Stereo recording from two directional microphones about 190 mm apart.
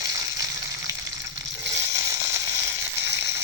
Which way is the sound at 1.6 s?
15° right (ahead or behind).